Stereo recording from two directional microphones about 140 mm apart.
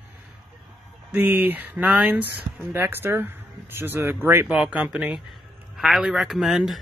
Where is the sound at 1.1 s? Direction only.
15° right (ahead or behind).